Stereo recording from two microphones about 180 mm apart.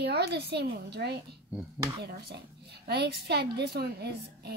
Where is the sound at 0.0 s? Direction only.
70° right (ahead or behind).